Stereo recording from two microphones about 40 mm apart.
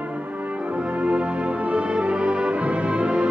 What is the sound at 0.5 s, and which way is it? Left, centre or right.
Music, right.